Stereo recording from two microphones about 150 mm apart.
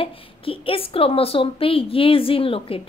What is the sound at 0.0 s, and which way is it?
A woman's voice, 35° left (ahead or behind).